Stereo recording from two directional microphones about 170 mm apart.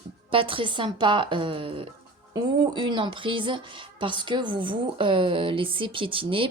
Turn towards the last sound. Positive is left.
turn(degrees=-30)  # may be behind; listen again after turning